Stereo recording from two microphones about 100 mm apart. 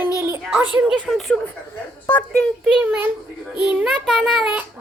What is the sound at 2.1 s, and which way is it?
Speech, 20° left (ahead or behind).